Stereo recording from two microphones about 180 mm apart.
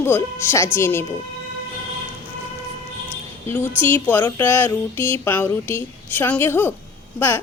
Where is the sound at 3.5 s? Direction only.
10° left (ahead or behind).